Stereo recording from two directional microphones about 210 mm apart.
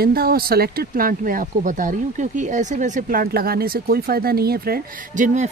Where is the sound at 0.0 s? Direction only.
45° right (ahead or behind).